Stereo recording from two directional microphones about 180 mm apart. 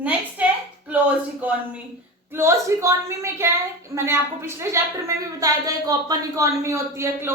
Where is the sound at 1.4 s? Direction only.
10° right (ahead or behind).